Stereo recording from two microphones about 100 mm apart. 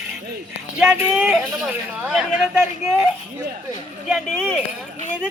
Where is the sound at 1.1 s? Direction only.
5° right (ahead or behind).